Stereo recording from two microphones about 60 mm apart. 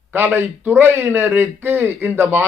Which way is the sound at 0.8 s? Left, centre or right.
Right.